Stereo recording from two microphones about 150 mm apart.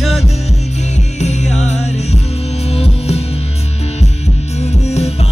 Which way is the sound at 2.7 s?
45° left (ahead or behind).